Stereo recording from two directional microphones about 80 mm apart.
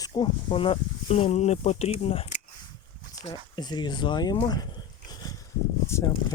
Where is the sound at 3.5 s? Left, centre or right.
Left.